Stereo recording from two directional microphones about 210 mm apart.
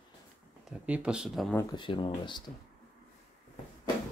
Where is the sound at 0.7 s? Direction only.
5° right (ahead or behind).